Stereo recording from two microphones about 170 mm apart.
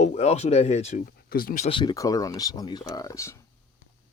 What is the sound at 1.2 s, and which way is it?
Speech, 60° left (ahead or behind).